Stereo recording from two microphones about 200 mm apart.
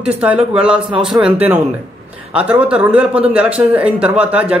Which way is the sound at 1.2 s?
10° right (ahead or behind).